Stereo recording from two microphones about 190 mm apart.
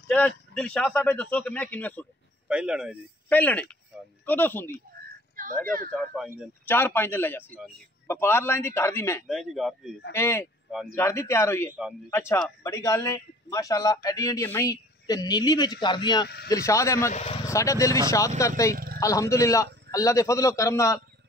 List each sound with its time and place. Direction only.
0.1 s a man's voice: 5° left (ahead or behind)
2.4 s speech: 5° right (ahead or behind)
3.3 s a man's voice: 10° left (ahead or behind)
3.9 s speech: 5° right (ahead or behind)
4.3 s a man's voice: 10° left (ahead or behind)
5.3 s a sound: 45° right (ahead or behind)
5.9 s a man's voice: 5° left (ahead or behind)
9.3 s speech: centre (ahead or behind)
10.1 s a man's voice: 15° left (ahead or behind)
17.1 s speech: 35° left (ahead or behind)
17.5 s a man's voice: 15° left (ahead or behind)